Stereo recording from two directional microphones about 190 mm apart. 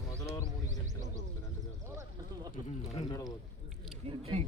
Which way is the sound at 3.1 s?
20° left (ahead or behind).